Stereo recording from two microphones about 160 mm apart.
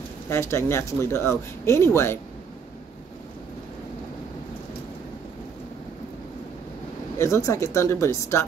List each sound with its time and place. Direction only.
0.3 s speech: 15° left (ahead or behind)
7.2 s speech: 20° left (ahead or behind)